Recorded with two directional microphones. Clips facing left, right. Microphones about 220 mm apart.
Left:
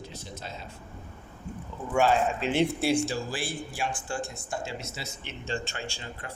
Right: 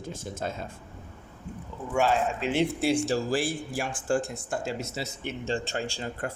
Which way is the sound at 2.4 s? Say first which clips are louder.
Even; 10° right (ahead or behind).